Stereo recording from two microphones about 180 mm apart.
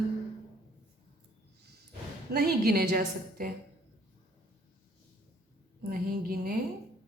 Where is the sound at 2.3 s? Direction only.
60° right (ahead or behind).